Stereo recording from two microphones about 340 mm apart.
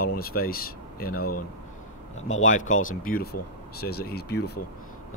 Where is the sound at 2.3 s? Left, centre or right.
Left.